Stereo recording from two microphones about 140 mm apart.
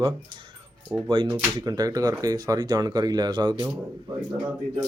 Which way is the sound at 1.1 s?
35° right (ahead or behind).